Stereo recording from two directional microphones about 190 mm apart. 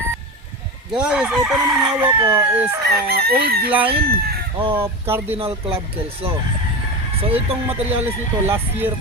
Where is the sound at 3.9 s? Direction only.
55° right (ahead or behind).